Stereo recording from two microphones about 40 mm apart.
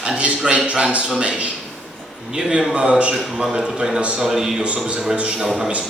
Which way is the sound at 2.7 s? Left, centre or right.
Right.